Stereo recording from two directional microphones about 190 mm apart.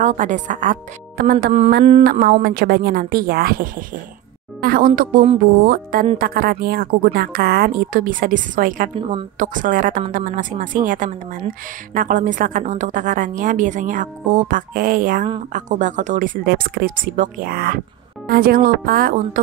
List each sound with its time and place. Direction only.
0.0 s a woman's voice: 40° right (ahead or behind)